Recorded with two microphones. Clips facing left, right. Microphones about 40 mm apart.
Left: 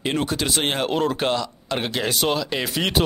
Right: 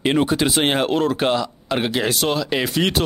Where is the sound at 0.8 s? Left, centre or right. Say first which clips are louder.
Right 3 dB; centre.